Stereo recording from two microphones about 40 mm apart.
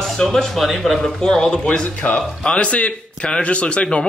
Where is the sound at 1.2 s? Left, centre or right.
Left.